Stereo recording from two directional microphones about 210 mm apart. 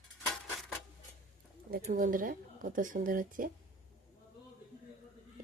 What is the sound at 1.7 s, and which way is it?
Speech, 45° right (ahead or behind).